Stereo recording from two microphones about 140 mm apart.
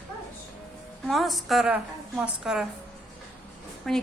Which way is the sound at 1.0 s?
Centre (ahead or behind).